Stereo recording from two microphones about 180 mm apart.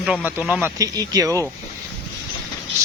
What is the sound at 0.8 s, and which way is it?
Speech, 20° right (ahead or behind).